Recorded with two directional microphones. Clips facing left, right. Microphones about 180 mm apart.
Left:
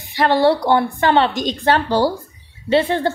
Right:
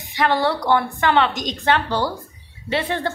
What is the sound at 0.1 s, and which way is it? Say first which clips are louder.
A woman's voice: left 5 dB; 30° left (ahead or behind).